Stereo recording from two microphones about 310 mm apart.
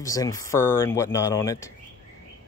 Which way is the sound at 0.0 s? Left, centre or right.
Centre.